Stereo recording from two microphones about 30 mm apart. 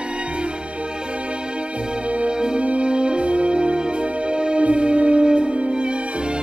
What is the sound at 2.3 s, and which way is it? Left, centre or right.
Music, right.